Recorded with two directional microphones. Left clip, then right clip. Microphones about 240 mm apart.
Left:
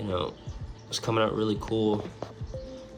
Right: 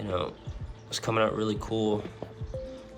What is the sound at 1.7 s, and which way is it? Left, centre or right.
Speech, centre.